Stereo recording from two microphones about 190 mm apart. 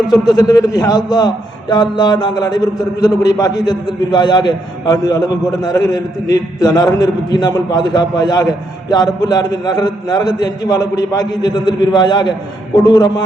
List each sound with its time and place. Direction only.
0.1 s a man's voice: 20° left (ahead or behind)